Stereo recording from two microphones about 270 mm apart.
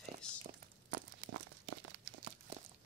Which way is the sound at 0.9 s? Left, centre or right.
Right.